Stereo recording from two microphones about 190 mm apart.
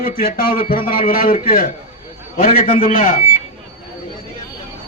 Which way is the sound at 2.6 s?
30° left (ahead or behind).